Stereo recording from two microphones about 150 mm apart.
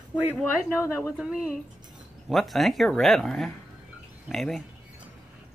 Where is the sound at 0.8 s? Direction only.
15° left (ahead or behind).